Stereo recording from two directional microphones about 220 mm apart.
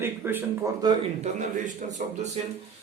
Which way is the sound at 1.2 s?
35° right (ahead or behind).